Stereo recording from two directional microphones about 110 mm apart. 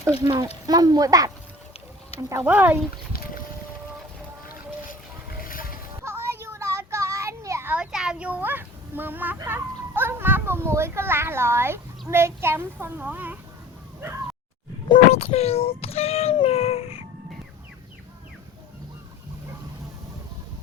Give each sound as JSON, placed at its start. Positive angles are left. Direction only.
{"t": 0.3, "sound": "speech", "side_deg": -35}
{"t": 2.3, "sound": "speech", "side_deg": -20}
{"t": 6.0, "sound": "child singing", "side_deg": -25}
{"t": 7.7, "sound": "a child's voice", "side_deg": -5}
{"t": 15.1, "sound": "speech", "side_deg": 75}